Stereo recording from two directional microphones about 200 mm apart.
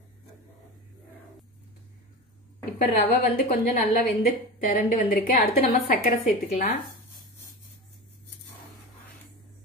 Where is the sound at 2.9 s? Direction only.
35° left (ahead or behind).